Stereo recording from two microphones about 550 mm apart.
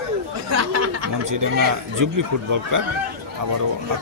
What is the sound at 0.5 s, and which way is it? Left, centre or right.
Chatter, right.